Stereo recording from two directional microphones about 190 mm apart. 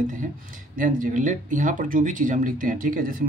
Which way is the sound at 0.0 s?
40° right (ahead or behind).